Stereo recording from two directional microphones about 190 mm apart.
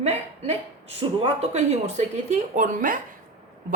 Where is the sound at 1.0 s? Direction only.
35° right (ahead or behind).